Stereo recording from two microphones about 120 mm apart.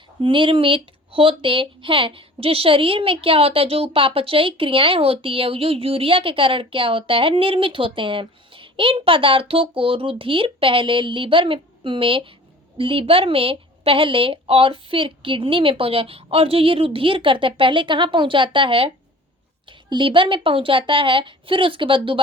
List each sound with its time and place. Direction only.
0.2 s speech: 45° right (ahead or behind)
19.9 s speech: 45° right (ahead or behind)